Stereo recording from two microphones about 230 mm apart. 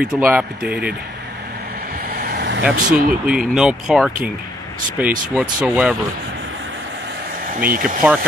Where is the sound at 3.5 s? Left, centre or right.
Centre.